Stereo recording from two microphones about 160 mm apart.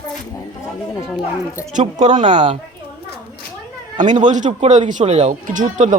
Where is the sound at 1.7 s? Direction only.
50° right (ahead or behind).